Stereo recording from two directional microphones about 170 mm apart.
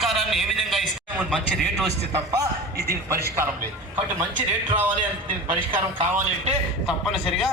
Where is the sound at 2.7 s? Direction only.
65° right (ahead or behind).